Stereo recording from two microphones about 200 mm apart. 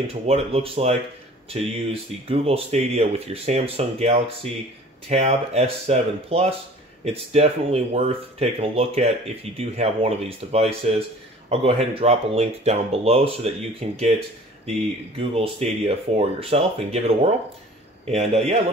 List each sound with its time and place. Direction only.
0.0 s speech: 30° right (ahead or behind)
15.1 s speech: 30° right (ahead or behind)